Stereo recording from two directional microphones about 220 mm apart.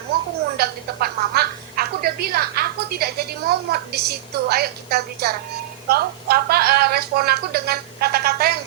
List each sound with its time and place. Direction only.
0.5 s speech: 45° right (ahead or behind)